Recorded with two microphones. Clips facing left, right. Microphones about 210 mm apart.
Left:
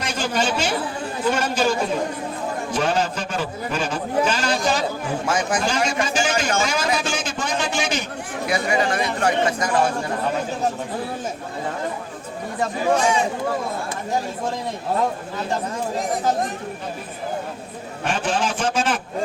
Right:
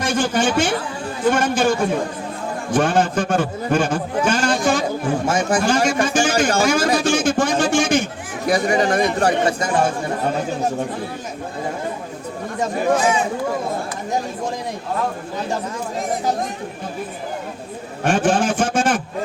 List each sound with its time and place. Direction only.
0.0 s a man's voice: 50° right (ahead or behind)
5.2 s a man's voice: 25° right (ahead or behind)
5.5 s a man's voice: 50° right (ahead or behind); by 9.7 s 30° right (ahead or behind)
18.0 s a man's voice: 50° right (ahead or behind)